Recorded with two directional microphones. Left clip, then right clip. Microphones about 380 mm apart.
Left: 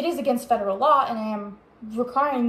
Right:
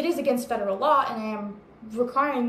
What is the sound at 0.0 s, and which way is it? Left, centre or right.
A woman's voice, centre.